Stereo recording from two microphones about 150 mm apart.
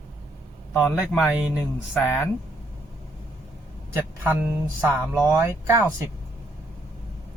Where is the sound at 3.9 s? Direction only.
10° right (ahead or behind).